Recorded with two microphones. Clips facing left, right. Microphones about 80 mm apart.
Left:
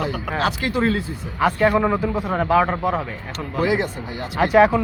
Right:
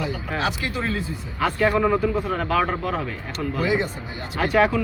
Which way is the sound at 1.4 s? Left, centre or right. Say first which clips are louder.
Left 3 dB; centre.